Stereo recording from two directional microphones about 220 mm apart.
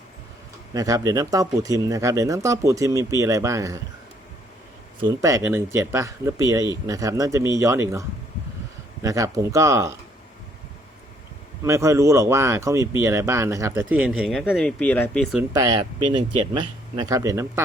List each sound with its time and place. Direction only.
0.7 s speech: 15° right (ahead or behind)
4.9 s speech: 15° right (ahead or behind)
11.6 s speech: 15° right (ahead or behind)
15.5 s speech: 15° right (ahead or behind)